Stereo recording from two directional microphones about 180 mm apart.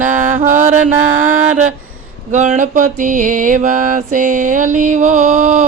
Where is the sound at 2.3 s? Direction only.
45° right (ahead or behind).